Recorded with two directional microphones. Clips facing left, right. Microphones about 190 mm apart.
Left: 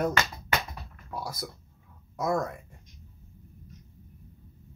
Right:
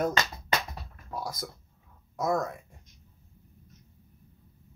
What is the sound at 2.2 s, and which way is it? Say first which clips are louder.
Speech: even; centre (ahead or behind).